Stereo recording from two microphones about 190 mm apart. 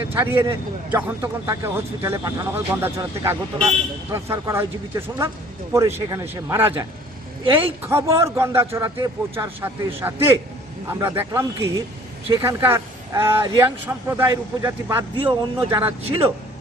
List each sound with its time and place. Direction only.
0.1 s speech: 10° right (ahead or behind)
7.9 s speech: 15° right (ahead or behind)
15.1 s speech: 25° right (ahead or behind)